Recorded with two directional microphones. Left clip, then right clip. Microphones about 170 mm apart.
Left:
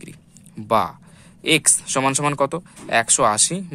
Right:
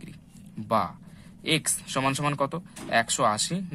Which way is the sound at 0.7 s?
45° left (ahead or behind).